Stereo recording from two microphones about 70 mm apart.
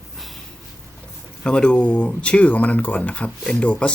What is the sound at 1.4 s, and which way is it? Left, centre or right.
Speech, centre.